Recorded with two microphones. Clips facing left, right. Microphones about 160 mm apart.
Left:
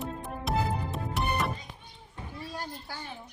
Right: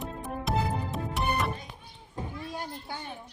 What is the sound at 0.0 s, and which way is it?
Music, centre (ahead or behind).